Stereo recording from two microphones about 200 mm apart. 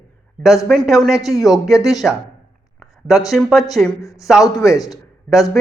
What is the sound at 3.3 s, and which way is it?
Speech, centre (ahead or behind).